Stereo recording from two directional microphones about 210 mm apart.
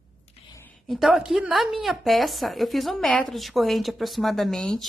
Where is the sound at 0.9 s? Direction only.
Centre (ahead or behind).